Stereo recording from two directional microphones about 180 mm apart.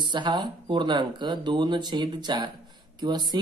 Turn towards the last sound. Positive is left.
turn(degrees=-25)  # may be behind; listen again after turning